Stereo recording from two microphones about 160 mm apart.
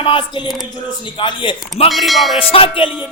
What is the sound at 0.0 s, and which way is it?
Speech, 35° left (ahead or behind).